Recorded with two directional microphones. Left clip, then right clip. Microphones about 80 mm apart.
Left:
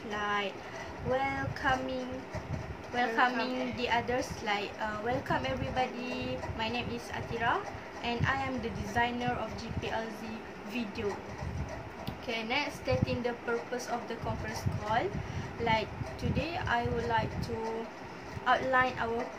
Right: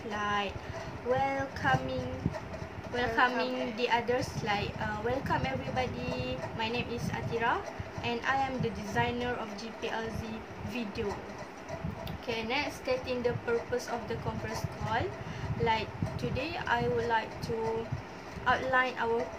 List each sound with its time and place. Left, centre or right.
0.1 s a woman's voice: right
3.0 s a woman's voice: right
12.3 s a woman's voice: right
15.6 s a woman's voice: right
18.4 s a woman's voice: right